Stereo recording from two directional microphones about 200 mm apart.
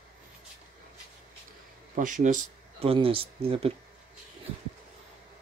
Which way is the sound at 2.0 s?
40° right (ahead or behind).